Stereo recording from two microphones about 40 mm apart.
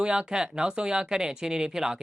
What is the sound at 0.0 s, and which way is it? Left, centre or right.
Speech, centre.